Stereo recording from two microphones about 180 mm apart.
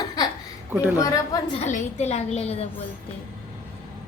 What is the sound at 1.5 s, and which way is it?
A woman's voice, 40° left (ahead or behind).